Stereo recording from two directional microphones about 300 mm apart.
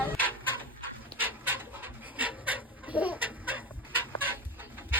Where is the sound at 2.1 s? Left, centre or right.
Centre.